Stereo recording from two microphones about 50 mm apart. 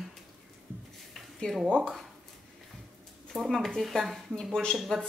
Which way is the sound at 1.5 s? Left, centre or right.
Centre.